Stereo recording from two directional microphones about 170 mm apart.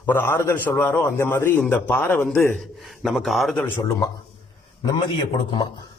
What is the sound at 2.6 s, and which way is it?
Speech, centre (ahead or behind).